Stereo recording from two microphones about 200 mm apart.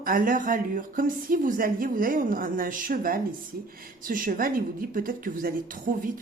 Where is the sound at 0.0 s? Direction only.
45° right (ahead or behind).